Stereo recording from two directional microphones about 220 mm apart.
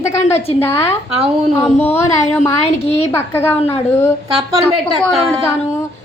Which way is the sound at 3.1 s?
10° left (ahead or behind).